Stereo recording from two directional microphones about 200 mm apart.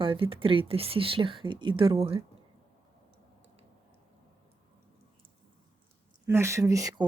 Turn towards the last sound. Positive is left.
turn(degrees=-15)  # may be behind; listen again after turning